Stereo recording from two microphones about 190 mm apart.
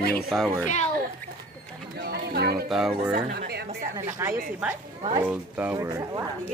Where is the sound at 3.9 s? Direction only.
15° right (ahead or behind).